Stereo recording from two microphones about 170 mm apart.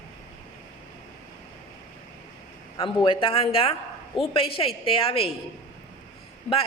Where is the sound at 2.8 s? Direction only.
30° left (ahead or behind).